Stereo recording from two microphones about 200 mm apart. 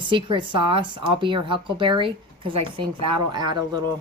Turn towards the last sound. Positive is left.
turn(degrees=-20)  # may be behind; listen again after turning